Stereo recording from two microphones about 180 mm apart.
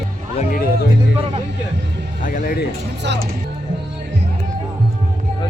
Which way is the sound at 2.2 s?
50° left (ahead or behind).